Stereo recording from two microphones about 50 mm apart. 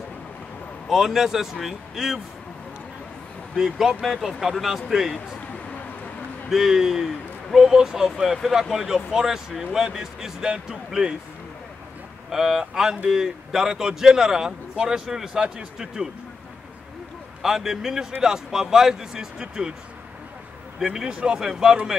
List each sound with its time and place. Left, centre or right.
0.8 s a man's voice: centre
3.5 s a man's voice: centre
6.5 s speech: centre
12.3 s speech: centre
17.4 s speech: centre
20.8 s speech: centre